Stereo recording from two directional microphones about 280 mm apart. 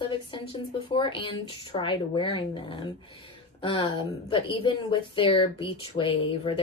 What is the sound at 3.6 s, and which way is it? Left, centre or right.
A woman's voice, centre.